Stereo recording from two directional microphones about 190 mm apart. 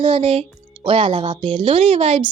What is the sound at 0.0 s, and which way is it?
A woman's voice, 30° right (ahead or behind).